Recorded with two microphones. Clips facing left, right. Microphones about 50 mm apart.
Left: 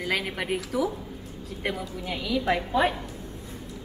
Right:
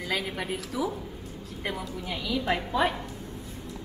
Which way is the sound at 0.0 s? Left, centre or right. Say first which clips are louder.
Left 2 dB; centre.